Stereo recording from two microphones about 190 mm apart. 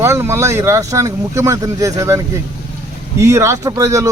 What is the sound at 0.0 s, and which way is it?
Speech, 15° right (ahead or behind).